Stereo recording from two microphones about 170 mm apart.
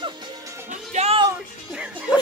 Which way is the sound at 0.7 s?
40° right (ahead or behind).